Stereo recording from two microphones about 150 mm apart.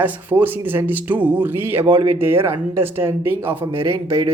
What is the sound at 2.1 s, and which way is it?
Speech, 15° right (ahead or behind).